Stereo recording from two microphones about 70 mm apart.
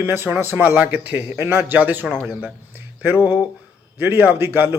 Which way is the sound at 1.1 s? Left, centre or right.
Right.